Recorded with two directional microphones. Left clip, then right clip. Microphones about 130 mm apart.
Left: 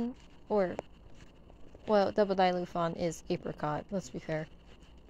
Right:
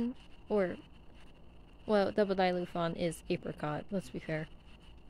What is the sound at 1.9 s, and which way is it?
Speech, 10° right (ahead or behind).